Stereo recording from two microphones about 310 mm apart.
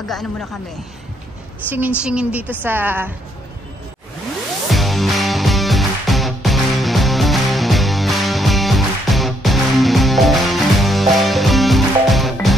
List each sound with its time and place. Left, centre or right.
0.1 s a woman's voice: centre
1.7 s a woman's voice: centre
4.6 s music: centre